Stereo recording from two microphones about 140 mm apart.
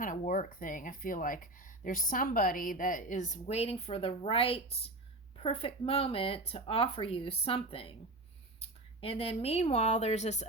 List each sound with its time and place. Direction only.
0.0 s speech: 70° left (ahead or behind)